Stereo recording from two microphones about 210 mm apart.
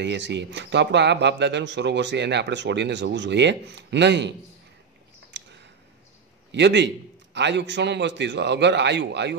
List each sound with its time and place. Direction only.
0.0 s speech: 55° right (ahead or behind)
5.3 s a sound: 55° right (ahead or behind)
6.5 s speech: 55° right (ahead or behind)